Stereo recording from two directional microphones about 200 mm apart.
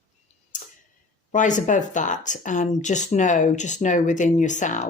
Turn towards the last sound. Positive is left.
turn(degrees=40)  # may be behind; listen again after turning